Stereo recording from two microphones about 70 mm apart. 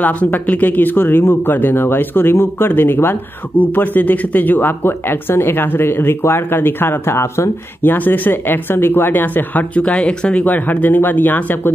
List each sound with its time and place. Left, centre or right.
0.0 s speech: left
7.8 s speech: left